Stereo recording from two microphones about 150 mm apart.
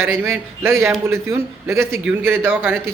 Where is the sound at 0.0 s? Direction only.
15° right (ahead or behind).